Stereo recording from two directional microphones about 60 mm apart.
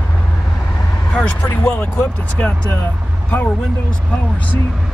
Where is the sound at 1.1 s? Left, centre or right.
Left.